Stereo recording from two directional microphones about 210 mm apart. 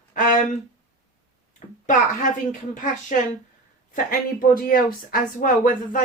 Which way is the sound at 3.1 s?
35° left (ahead or behind).